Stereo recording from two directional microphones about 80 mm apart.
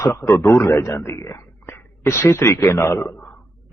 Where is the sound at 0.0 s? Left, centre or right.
Left.